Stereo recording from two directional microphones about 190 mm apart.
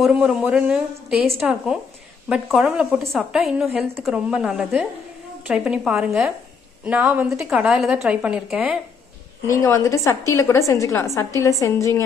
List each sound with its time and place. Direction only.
0.0 s a woman's voice: 5° right (ahead or behind)
9.5 s a woman's voice: 15° left (ahead or behind)